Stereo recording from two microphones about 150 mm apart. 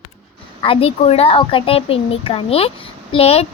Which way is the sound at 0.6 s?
40° left (ahead or behind).